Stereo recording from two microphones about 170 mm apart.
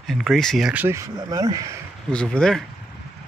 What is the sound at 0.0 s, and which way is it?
Speech, centre (ahead or behind).